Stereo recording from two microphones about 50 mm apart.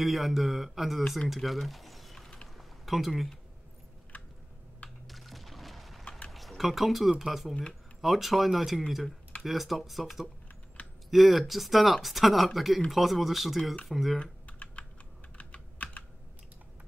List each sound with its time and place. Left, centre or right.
0.0 s speech: centre
1.3 s a sound: centre
4.8 s typing: centre
6.0 s a sound: left
6.3 s speech: centre
14.2 s typing: left
15.3 s computer keyboard: left